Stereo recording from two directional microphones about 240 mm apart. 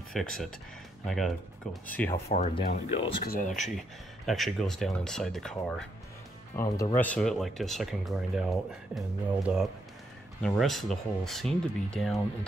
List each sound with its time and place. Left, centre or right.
0.1 s speech: centre
2.1 s speech: left
4.3 s speech: centre